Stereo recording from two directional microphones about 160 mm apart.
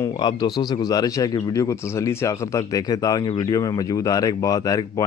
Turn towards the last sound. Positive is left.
turn(degrees=20)  # may be behind; listen again after turning